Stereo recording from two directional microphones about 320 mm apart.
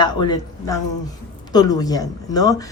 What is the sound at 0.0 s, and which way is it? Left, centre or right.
Speech, centre.